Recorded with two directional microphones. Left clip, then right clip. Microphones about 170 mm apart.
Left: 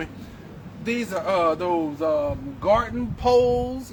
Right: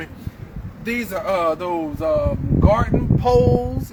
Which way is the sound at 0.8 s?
80° right.